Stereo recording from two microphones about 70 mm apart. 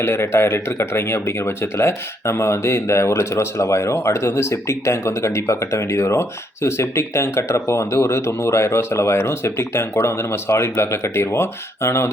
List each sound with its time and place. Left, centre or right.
0.0 s speech: left